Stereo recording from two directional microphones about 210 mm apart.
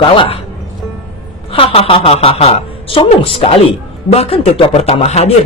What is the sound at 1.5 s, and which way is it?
Speech, 25° left (ahead or behind).